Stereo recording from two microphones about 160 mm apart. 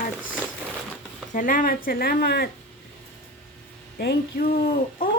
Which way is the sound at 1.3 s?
55° left (ahead or behind).